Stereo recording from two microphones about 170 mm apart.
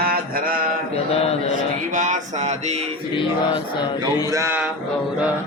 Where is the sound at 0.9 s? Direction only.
35° left (ahead or behind).